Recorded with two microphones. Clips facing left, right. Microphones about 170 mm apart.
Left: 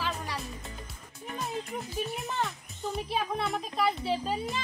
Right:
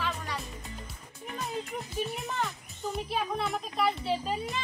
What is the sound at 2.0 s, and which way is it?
Speech, centre (ahead or behind).